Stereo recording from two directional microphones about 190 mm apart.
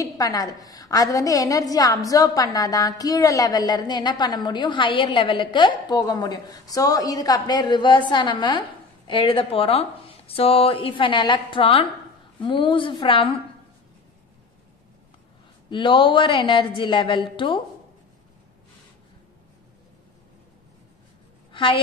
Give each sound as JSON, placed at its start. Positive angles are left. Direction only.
{"t": 0.0, "sound": "a woman's voice", "side_deg": 20}
{"t": 15.7, "sound": "a woman's voice", "side_deg": 25}
{"t": 21.5, "sound": "a sound", "side_deg": 25}